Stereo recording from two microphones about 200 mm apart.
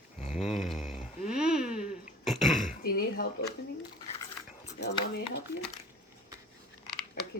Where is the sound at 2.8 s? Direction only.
50° left (ahead or behind).